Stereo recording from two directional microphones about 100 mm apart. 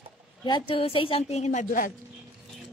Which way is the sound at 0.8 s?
65° left (ahead or behind).